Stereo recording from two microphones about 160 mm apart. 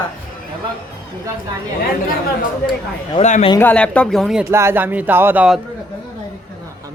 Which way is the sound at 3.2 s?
45° left (ahead or behind).